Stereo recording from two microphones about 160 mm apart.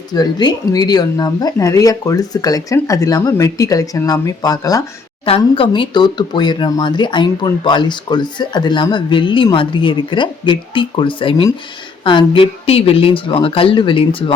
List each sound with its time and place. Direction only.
0.1 s speech: 25° left (ahead or behind)
5.2 s speech: 35° left (ahead or behind)